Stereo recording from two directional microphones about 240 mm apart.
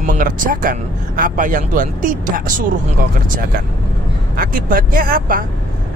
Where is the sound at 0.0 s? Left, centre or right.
Right.